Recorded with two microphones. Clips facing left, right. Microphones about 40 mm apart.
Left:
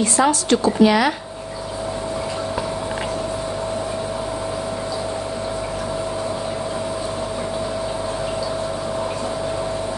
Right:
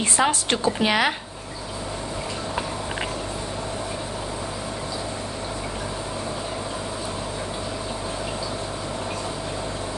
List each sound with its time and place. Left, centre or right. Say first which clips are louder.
0.0 s a woman's voice: left 4 dB; right